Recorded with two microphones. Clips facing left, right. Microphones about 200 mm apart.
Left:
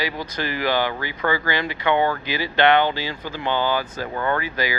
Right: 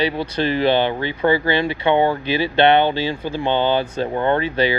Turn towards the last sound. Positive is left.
turn(degrees=-25)  # may be behind; listen again after turning